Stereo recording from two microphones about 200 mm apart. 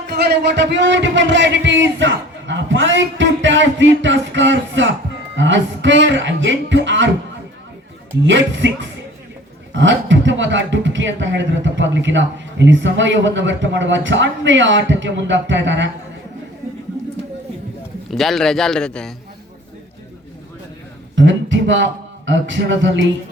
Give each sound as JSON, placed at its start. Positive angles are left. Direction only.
{"t": 0.1, "sound": "speech", "side_deg": -55}
{"t": 8.2, "sound": "speech", "side_deg": -70}
{"t": 18.1, "sound": "a man's voice", "side_deg": 0}
{"t": 21.2, "sound": "speech", "side_deg": -65}
{"t": 22.3, "sound": "music", "side_deg": -65}